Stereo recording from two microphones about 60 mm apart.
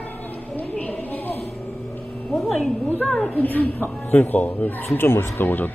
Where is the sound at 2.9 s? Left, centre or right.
Left.